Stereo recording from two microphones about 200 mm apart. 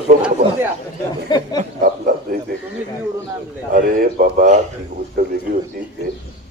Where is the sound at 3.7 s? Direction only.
45° right (ahead or behind).